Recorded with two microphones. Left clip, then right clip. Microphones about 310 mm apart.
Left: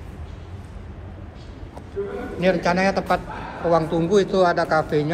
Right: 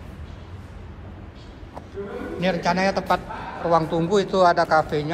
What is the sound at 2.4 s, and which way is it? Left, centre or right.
A man's voice, centre.